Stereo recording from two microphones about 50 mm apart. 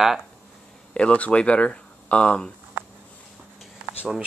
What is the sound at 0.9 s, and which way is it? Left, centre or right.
Speech, left.